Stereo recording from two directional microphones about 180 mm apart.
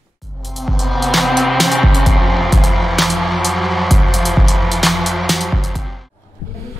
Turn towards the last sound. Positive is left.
turn(degrees=0)  # may be behind; listen again after turning